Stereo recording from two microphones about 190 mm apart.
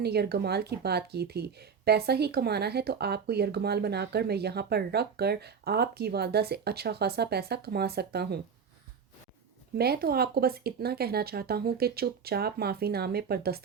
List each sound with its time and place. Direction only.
0.0 s speech: 60° right (ahead or behind)
9.7 s speech: 55° right (ahead or behind)